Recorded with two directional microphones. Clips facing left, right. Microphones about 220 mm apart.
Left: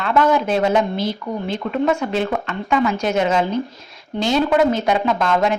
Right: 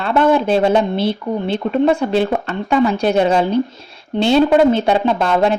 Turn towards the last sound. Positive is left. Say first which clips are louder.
# right 3 dB
turn(degrees=-30)  # may be behind; listen again after turning